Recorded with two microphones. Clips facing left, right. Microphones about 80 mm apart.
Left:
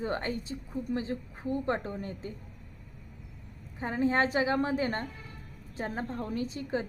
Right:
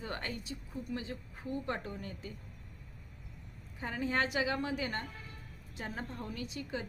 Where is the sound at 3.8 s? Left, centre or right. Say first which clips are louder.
Left 6 dB; left.